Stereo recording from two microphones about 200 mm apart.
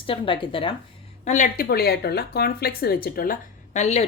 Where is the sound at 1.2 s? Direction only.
40° left (ahead or behind).